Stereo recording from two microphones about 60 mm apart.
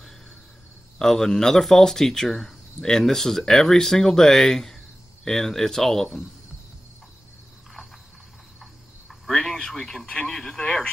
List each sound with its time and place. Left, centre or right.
0.9 s speech: centre
9.2 s speech: centre
10.6 s speech: centre